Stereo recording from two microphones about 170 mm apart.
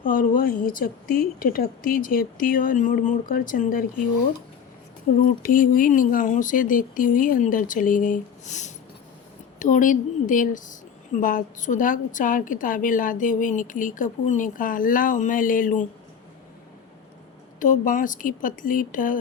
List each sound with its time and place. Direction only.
0.0 s speech: 55° left (ahead or behind)
5.2 s a woman's voice: 55° left (ahead or behind)
17.6 s a woman's voice: 50° left (ahead or behind)